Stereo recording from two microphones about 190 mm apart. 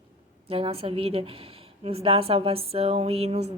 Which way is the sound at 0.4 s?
30° right (ahead or behind).